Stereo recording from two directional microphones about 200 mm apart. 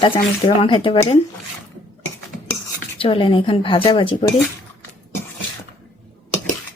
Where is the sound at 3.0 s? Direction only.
25° left (ahead or behind).